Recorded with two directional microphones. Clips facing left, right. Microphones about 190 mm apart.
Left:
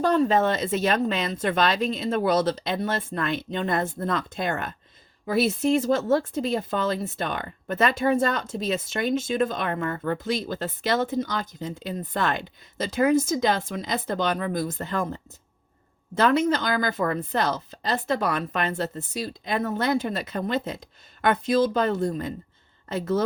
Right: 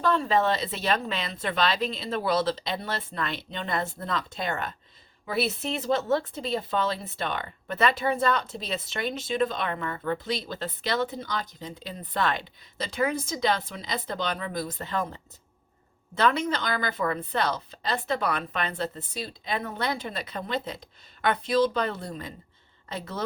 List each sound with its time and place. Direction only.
0.0 s speech: 45° left (ahead or behind)